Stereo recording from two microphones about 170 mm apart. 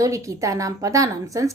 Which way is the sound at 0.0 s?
20° right (ahead or behind).